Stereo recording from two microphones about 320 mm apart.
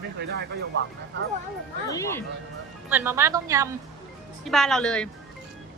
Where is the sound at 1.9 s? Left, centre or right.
Centre.